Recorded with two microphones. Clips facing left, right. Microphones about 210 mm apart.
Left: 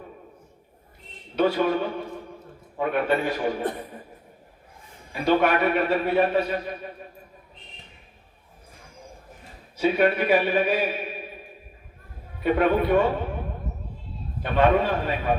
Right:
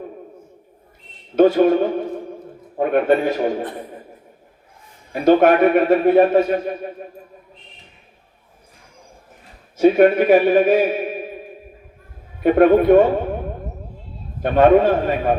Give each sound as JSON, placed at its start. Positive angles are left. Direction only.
{"t": 1.4, "sound": "a man's voice", "side_deg": -45}
{"t": 5.2, "sound": "a man's voice", "side_deg": -45}
{"t": 9.7, "sound": "a man's voice", "side_deg": -45}
{"t": 12.4, "sound": "a man's voice", "side_deg": -50}
{"t": 14.4, "sound": "a man's voice", "side_deg": -50}